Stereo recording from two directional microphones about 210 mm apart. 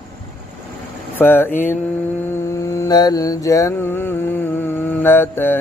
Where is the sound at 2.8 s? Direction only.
20° left (ahead or behind).